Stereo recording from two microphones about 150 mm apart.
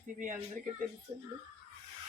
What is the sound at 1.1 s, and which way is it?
Speech, 35° right (ahead or behind).